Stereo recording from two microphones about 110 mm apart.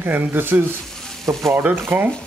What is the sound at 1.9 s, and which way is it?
Speech, 15° right (ahead or behind).